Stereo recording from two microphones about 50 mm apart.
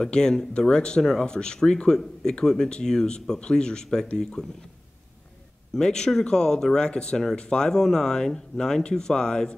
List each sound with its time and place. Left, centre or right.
0.0 s speech: centre
5.8 s speech: centre